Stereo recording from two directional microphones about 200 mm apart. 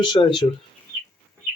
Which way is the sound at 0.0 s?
25° left (ahead or behind).